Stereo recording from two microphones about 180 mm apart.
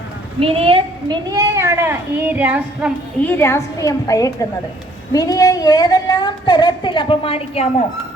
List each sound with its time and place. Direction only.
0.3 s a woman's voice: 30° right (ahead or behind); by 2.9 s 5° right (ahead or behind)
3.2 s a woman's voice: 10° left (ahead or behind); by 7.7 s 35° left (ahead or behind)